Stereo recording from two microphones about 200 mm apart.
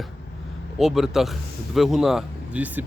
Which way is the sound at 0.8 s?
Centre (ahead or behind).